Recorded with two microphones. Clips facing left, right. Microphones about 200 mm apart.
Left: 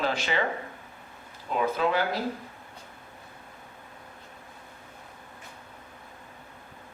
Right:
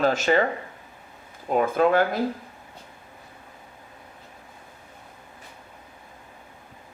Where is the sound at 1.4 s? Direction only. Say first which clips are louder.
Right 6 dB; 50° right (ahead or behind).